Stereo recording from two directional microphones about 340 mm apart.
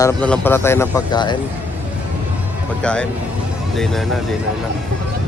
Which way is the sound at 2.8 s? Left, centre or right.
Centre.